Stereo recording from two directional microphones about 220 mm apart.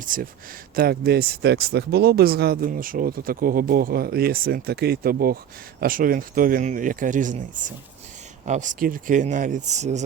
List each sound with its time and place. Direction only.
0.0 s speech: 40° right (ahead or behind)